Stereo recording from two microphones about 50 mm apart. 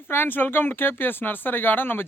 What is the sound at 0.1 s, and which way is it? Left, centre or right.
Speech, left.